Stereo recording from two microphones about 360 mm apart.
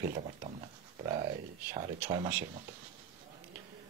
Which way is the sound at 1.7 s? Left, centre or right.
Centre.